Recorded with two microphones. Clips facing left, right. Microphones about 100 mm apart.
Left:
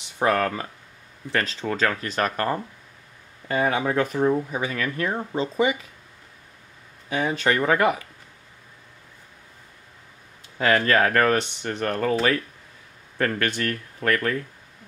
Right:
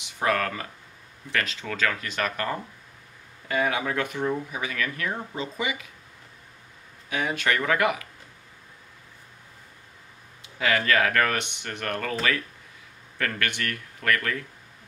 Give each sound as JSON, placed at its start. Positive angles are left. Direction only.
{"t": 0.0, "sound": "speech", "side_deg": 30}
{"t": 7.1, "sound": "speech", "side_deg": 30}
{"t": 10.4, "sound": "speech", "side_deg": 40}